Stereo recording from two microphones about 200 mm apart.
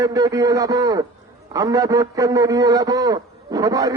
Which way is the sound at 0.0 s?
15° right (ahead or behind).